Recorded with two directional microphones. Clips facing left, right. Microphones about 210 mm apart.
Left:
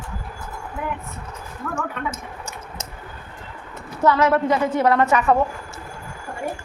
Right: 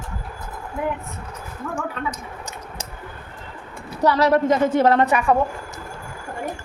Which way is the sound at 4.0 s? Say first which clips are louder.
Right 1 dB; 35° right (ahead or behind).